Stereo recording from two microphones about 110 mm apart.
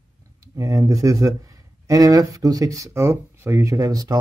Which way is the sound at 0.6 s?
30° right (ahead or behind).